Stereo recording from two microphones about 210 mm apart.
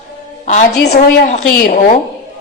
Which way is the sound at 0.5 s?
35° left (ahead or behind).